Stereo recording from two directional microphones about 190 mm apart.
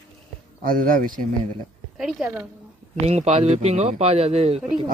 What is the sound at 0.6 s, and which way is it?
Speech, 45° right (ahead or behind).